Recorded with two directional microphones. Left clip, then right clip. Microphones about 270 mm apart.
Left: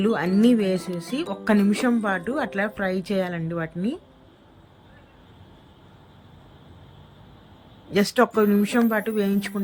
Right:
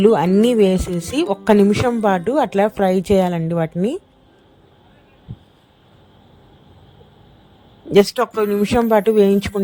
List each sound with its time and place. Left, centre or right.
0.0 s speech: right
7.9 s speech: right